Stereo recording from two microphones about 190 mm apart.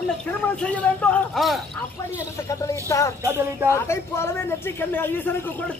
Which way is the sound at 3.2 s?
15° right (ahead or behind).